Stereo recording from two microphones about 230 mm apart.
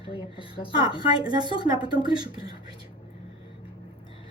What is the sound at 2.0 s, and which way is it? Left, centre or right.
Speech, centre.